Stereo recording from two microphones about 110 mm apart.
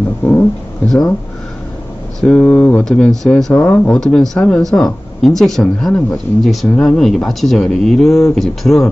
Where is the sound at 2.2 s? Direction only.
10° left (ahead or behind).